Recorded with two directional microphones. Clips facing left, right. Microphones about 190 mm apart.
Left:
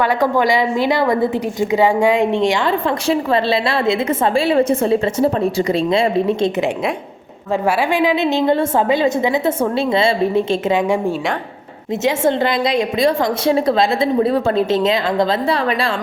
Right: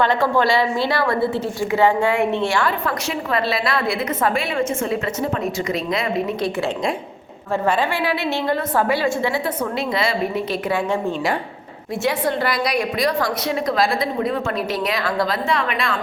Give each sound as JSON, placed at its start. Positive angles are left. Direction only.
{"t": 0.0, "sound": "a woman's voice", "side_deg": 15}
{"t": 7.7, "sound": "a woman's voice", "side_deg": 15}
{"t": 12.0, "sound": "a woman's voice", "side_deg": 20}